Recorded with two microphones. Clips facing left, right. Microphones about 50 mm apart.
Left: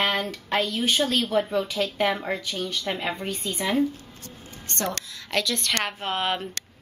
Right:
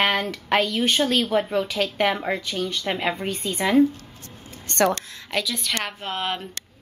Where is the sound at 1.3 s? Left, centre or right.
Right.